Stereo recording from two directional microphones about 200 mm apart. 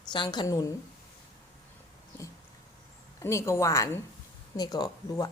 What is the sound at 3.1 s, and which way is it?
A woman's voice, 15° left (ahead or behind).